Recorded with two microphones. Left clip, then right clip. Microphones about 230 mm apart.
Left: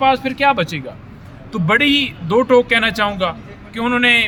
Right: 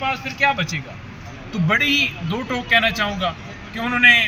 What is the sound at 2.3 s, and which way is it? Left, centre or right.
Speech, left.